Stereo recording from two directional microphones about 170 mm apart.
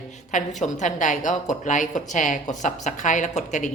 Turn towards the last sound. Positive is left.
turn(degrees=45)  # may be behind; listen again after turning